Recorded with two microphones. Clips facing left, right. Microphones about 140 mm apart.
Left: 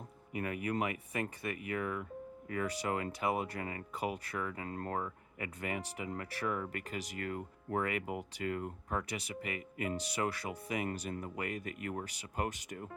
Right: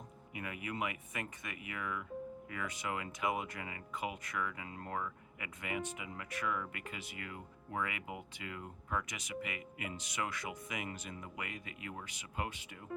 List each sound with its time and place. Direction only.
0.3 s speech: 45° left (ahead or behind)
4.9 s speech: 35° left (ahead or behind)
12.0 s speech: 35° left (ahead or behind)